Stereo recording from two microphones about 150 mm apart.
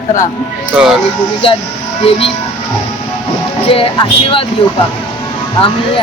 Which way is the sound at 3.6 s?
35° left (ahead or behind).